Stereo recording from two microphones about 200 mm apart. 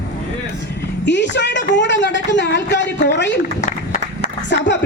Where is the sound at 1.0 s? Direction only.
60° left (ahead or behind).